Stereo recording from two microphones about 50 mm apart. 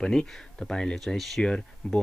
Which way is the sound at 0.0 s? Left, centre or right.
Centre.